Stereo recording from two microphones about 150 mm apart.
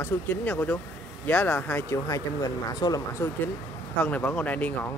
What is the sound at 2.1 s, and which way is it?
Speech, 25° left (ahead or behind).